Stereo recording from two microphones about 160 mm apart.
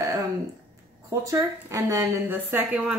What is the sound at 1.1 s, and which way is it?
A woman's voice, 20° right (ahead or behind).